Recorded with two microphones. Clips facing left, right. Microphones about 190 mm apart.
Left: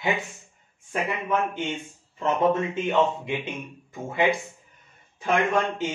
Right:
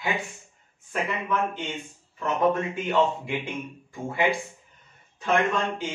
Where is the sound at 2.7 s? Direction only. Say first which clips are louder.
Left 1 dB; 20° left (ahead or behind).